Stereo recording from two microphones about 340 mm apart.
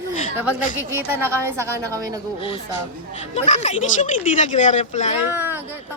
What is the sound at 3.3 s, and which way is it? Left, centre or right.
Speech, centre.